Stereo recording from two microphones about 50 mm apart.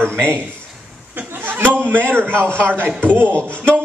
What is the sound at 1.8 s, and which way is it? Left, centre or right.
A man's voice, right.